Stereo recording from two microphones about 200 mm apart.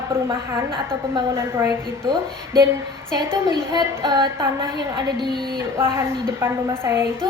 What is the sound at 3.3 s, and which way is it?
A woman's voice, 20° right (ahead or behind).